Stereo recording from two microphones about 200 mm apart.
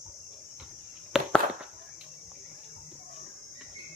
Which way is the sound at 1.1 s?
5° right (ahead or behind).